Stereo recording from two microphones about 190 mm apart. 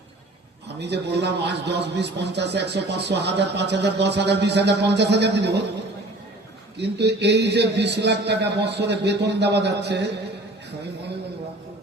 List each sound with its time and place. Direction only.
0.8 s a man's voice: 65° right (ahead or behind)
6.7 s a man's voice: 65° right (ahead or behind)